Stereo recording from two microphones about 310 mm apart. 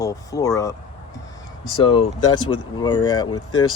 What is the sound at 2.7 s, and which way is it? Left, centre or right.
Speech, centre.